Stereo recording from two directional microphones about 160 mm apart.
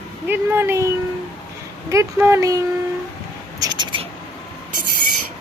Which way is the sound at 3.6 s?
25° right (ahead or behind).